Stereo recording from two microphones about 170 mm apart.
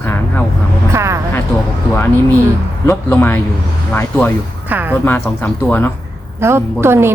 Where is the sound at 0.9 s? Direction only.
15° right (ahead or behind).